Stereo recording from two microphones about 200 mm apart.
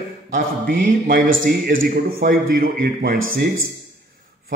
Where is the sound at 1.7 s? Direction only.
45° right (ahead or behind).